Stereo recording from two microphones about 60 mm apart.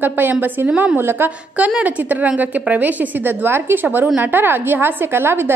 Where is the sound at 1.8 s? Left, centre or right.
Right.